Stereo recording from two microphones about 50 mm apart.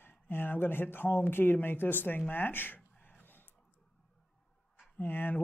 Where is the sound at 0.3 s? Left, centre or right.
Left.